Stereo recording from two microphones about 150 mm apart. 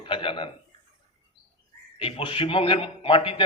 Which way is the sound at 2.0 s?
35° left (ahead or behind).